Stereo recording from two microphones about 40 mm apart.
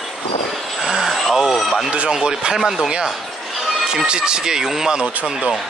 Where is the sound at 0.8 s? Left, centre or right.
Centre.